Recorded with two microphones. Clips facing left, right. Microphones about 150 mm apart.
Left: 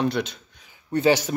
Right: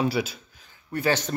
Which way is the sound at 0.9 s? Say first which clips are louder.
Left 5 dB; 20° left (ahead or behind).